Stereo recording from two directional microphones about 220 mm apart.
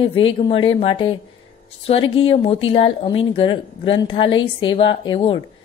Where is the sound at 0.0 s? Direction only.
25° left (ahead or behind).